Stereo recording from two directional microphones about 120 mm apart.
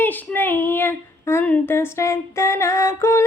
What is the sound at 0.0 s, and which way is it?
Child singing, 15° left (ahead or behind).